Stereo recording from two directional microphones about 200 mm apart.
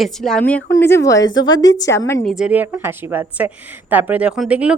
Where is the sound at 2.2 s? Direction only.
5° right (ahead or behind).